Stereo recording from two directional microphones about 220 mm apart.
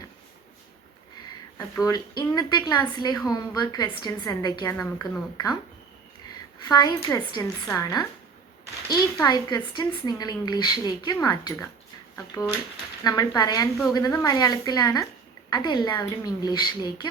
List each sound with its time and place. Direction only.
1.5 s a woman's voice: 15° left (ahead or behind)
6.6 s a woman's voice: 15° left (ahead or behind)